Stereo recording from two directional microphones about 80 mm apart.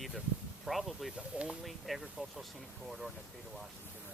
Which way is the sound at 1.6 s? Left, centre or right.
Centre.